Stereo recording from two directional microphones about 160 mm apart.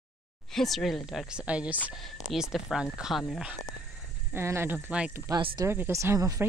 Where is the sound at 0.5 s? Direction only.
Centre (ahead or behind).